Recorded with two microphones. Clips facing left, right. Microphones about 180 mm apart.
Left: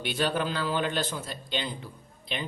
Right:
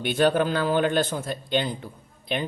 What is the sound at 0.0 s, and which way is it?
A man's voice, 50° right (ahead or behind).